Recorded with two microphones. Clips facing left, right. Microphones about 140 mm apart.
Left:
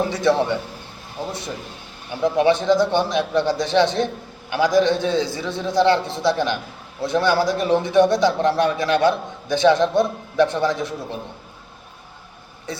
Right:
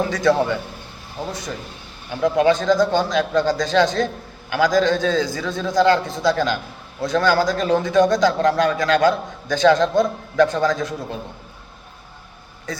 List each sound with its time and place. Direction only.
0.1 s speech: 25° left (ahead or behind)
2.2 s speech: 25° left (ahead or behind)